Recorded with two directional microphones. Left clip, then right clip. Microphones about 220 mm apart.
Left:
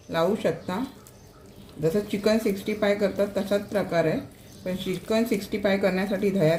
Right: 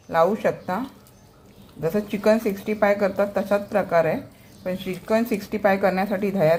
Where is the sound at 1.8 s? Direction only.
30° right (ahead or behind).